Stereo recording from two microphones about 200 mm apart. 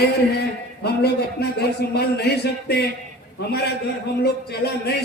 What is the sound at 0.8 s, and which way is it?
A man's voice, 55° left (ahead or behind).